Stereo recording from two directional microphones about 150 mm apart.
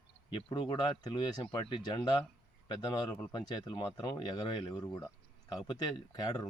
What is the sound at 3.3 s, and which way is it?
Speech, 30° left (ahead or behind).